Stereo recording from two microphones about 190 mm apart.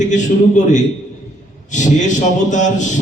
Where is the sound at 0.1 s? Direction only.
40° left (ahead or behind).